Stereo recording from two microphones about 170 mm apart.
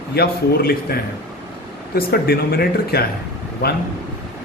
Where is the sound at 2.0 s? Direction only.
65° left (ahead or behind).